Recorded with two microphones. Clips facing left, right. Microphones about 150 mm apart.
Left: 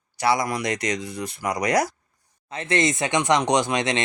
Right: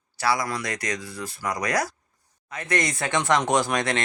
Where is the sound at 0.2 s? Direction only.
20° left (ahead or behind).